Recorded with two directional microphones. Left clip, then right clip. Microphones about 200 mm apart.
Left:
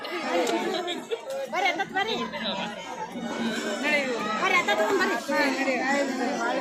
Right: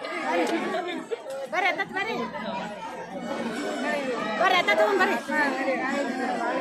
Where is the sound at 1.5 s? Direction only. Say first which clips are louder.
Even; 10° right (ahead or behind).